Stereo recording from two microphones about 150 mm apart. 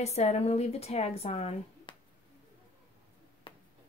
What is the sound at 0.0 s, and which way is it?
A woman's voice, 45° left (ahead or behind).